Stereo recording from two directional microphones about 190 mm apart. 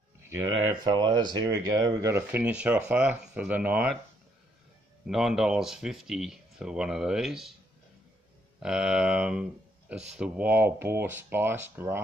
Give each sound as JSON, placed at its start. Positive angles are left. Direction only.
{"t": 0.6, "sound": "speech", "side_deg": -25}
{"t": 5.0, "sound": "speech", "side_deg": 0}
{"t": 8.5, "sound": "speech", "side_deg": -5}